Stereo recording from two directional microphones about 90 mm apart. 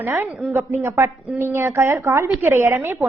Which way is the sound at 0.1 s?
30° right (ahead or behind).